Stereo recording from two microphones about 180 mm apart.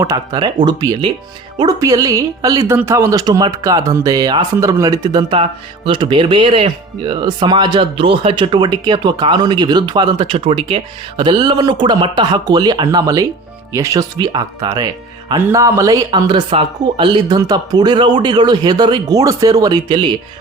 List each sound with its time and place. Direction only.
0.0 s a woman's voice: 20° right (ahead or behind)